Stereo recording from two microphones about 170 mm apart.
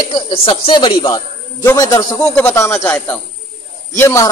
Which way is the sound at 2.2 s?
10° left (ahead or behind).